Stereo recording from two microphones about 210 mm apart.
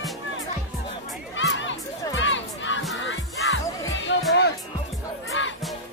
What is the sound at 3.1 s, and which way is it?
Music, 60° left (ahead or behind).